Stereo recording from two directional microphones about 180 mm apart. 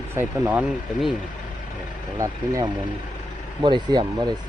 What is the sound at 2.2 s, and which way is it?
Speech, 15° right (ahead or behind).